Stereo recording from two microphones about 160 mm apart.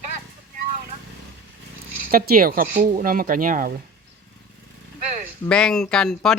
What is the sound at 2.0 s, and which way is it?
Speech, 65° right (ahead or behind).